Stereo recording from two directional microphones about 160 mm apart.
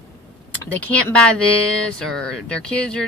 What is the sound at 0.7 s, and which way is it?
Speech, 10° left (ahead or behind).